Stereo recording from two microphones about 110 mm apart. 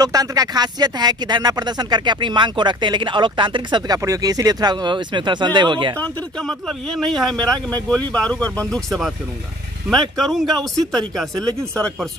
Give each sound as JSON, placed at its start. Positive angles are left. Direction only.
{"t": 0.0, "sound": "speech", "side_deg": -35}
{"t": 5.9, "sound": "speech", "side_deg": 15}
{"t": 6.4, "sound": "speech", "side_deg": 5}